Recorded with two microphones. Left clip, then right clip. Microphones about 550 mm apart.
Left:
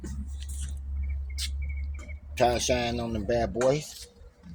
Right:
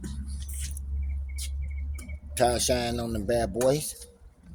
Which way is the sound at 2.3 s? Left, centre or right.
Right.